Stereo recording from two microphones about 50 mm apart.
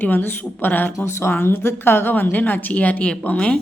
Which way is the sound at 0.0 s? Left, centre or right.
Left.